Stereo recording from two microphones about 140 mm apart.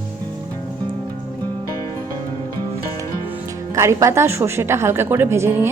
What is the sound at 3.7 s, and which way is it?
A woman's voice, 20° right (ahead or behind).